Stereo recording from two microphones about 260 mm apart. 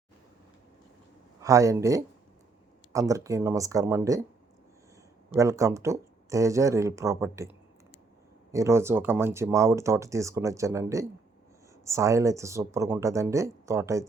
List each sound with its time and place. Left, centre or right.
1.4 s speech: centre
5.3 s speech: centre
8.5 s speech: centre